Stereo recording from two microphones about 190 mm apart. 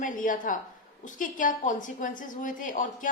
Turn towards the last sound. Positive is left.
turn(degrees=45)  # may be behind; listen again after turning